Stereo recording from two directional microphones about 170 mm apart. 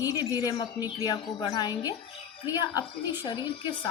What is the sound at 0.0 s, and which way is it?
Speech, 20° left (ahead or behind).